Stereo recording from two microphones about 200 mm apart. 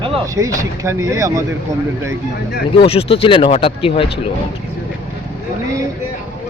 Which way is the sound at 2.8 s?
30° left (ahead or behind).